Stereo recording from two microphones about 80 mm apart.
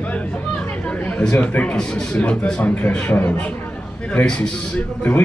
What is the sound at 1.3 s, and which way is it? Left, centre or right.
A man's voice, left.